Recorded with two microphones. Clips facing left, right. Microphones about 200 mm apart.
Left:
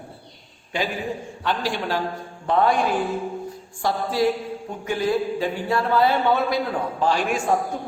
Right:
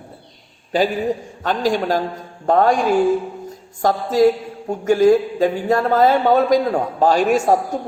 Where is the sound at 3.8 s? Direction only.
45° right (ahead or behind).